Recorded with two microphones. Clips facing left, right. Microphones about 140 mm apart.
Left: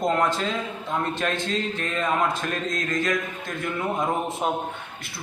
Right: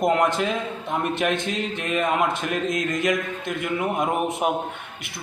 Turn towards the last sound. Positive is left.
turn(degrees=-15)  # may be behind; listen again after turning